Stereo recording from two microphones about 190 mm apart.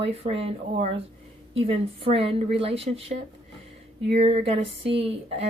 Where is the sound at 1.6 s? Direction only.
30° right (ahead or behind).